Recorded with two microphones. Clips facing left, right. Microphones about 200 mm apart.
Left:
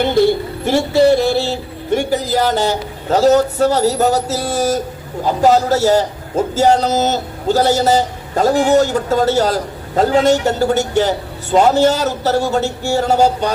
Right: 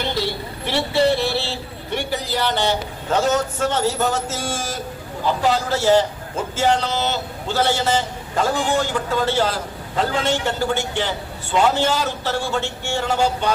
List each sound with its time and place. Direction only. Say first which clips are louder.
0.0 s a man's voice: left 11 dB; 50° left (ahead or behind)